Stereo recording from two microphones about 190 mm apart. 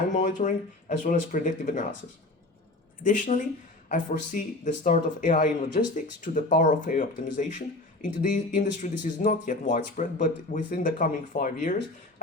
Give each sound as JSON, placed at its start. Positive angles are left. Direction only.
{"t": 0.2, "sound": "speech", "side_deg": 40}
{"t": 3.0, "sound": "speech", "side_deg": 40}